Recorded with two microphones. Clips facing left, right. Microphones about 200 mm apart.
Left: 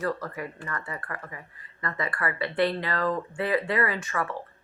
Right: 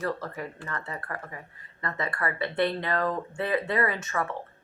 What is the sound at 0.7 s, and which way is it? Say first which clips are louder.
Speech: even; 25° right (ahead or behind).